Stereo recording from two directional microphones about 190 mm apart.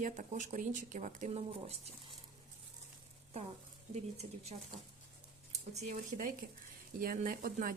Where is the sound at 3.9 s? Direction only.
35° right (ahead or behind).